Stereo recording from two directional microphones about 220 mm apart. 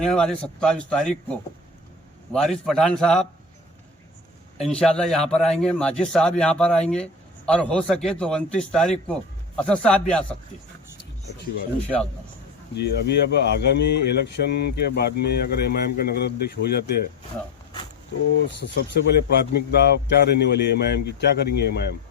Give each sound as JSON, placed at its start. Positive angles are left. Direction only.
{"t": 0.0, "sound": "a man's voice", "side_deg": 5}
{"t": 2.3, "sound": "a man's voice", "side_deg": 0}
{"t": 4.5, "sound": "a man's voice", "side_deg": 0}
{"t": 12.7, "sound": "speech", "side_deg": 50}
{"t": 18.4, "sound": "speech", "side_deg": 55}